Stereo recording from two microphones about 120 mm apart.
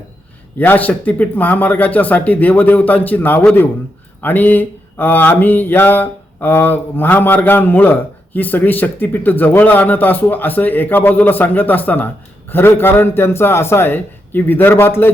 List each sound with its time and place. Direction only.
0.6 s mantra: 15° left (ahead or behind)
12.5 s a man's voice: 20° left (ahead or behind)